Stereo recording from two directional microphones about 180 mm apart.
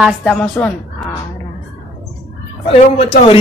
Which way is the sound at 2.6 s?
35° left (ahead or behind).